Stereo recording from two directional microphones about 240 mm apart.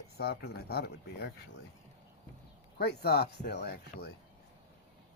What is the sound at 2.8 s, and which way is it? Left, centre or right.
Speech, left.